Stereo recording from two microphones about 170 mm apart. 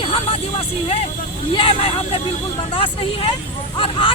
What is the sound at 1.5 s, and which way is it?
Speech, 30° left (ahead or behind).